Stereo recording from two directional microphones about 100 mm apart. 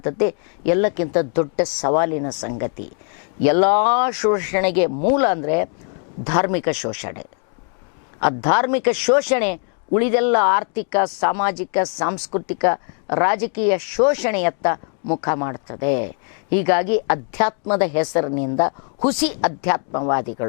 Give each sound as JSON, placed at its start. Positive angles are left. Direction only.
{"t": 0.0, "sound": "speech", "side_deg": 15}